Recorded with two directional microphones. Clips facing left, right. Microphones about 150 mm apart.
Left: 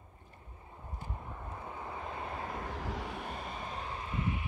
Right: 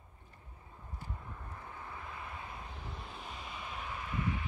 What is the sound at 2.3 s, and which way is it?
Vehicle, 50° left (ahead or behind).